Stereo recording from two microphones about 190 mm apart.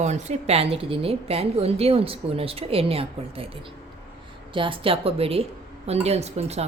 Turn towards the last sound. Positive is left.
turn(degrees=-35)  # may be behind; listen again after turning